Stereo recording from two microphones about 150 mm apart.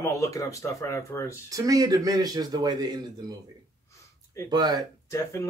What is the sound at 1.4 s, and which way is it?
A man's voice, 25° right (ahead or behind).